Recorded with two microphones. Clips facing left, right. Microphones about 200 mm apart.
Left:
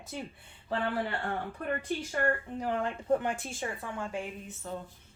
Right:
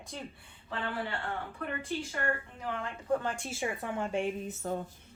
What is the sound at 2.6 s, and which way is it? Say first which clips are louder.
Speech: left 5 dB; 35° left (ahead or behind).